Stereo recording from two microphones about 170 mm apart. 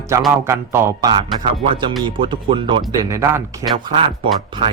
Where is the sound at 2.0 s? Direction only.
30° right (ahead or behind).